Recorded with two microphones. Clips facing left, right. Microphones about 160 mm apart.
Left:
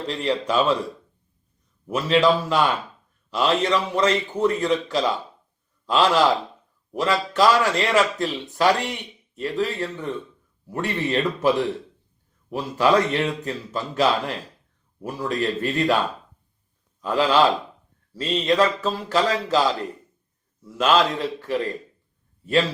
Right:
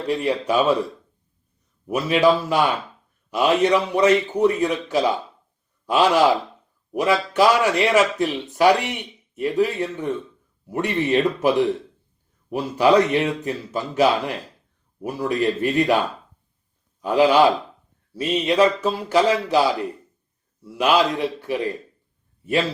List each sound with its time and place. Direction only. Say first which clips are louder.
0.1 s a man's voice: right 3 dB; 10° right (ahead or behind)
1.9 s a man's voice: right 1 dB; 15° right (ahead or behind)
17.0 s a man's voice: right 3 dB; 15° right (ahead or behind)